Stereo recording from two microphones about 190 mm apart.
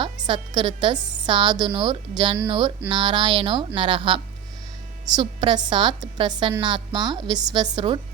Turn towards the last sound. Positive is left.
turn(degrees=-20)  # may be behind; listen again after turning